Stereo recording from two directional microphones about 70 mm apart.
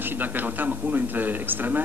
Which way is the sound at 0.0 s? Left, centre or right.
Right.